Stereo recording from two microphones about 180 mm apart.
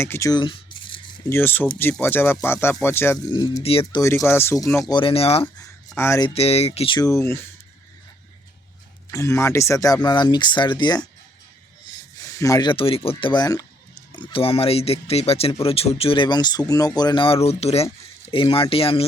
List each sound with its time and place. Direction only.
0.0 s a sound: 15° left (ahead or behind)
1.3 s speech: 10° left (ahead or behind)
3.6 s speech: 30° left (ahead or behind)
4.0 s speech: 15° left (ahead or behind)
4.9 s speech: 30° left (ahead or behind)
6.0 s speech: 15° left (ahead or behind)
6.2 s speech: 35° left (ahead or behind); by 7.3 s 15° left (ahead or behind)
9.1 s speech: 15° left (ahead or behind); by 19.0 s 30° left (ahead or behind)